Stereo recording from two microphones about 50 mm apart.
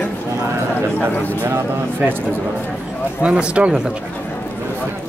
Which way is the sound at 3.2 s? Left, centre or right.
Right.